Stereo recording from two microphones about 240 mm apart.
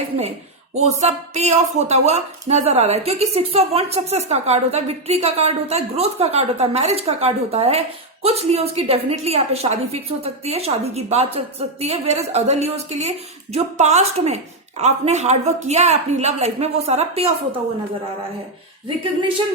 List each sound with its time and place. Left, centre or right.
0.7 s speech: right